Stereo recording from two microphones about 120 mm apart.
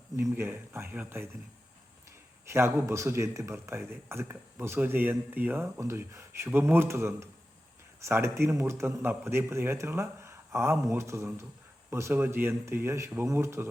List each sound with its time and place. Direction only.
0.2 s a man's voice: 20° right (ahead or behind)
2.5 s a man's voice: 20° right (ahead or behind)